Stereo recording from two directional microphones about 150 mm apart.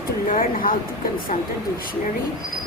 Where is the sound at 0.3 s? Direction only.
70° left (ahead or behind).